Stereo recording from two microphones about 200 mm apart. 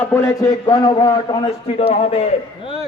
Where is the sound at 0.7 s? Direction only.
20° left (ahead or behind).